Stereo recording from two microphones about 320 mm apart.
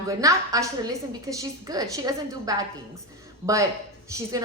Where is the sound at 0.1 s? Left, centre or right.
Centre.